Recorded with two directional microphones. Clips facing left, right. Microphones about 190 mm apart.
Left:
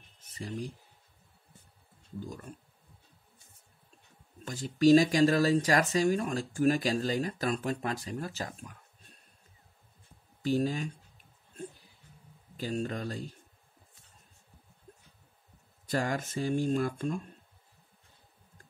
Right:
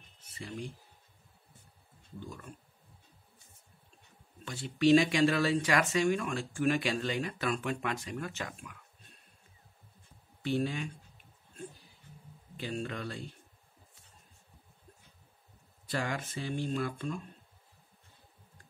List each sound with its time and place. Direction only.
0.2 s speech: 40° left (ahead or behind)
2.1 s speech: 40° left (ahead or behind)
4.5 s speech: 40° left (ahead or behind)
10.4 s speech: 40° left (ahead or behind)
12.5 s speech: 40° left (ahead or behind)
15.9 s speech: 40° left (ahead or behind)